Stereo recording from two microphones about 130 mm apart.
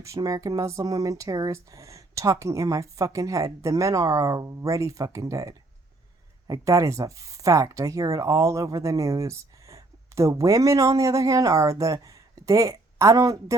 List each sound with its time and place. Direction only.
0.0 s speech: 25° right (ahead or behind)